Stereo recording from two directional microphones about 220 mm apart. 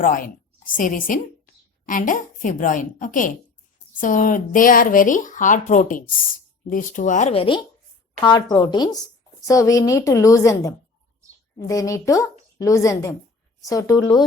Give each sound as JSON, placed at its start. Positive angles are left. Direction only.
{"t": 0.0, "sound": "a woman's voice", "side_deg": 40}